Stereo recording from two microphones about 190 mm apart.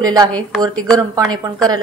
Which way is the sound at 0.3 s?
5° left (ahead or behind).